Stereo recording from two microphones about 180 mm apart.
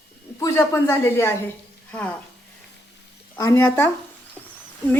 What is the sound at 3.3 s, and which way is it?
Speech, 15° left (ahead or behind).